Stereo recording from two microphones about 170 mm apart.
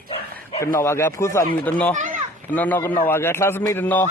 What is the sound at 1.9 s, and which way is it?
Children playing, 50° right (ahead or behind).